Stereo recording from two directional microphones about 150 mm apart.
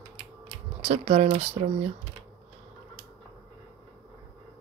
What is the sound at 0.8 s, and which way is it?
Speech, 40° right (ahead or behind).